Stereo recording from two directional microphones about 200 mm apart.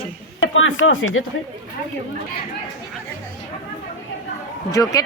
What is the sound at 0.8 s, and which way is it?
Speech, 80° left.